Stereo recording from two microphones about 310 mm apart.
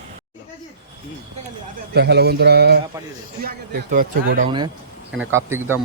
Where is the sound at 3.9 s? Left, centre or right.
Right.